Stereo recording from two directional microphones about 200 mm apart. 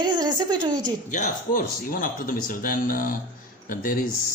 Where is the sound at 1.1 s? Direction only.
45° left (ahead or behind).